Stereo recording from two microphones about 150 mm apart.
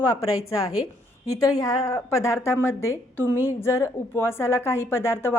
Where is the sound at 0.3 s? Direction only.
20° left (ahead or behind).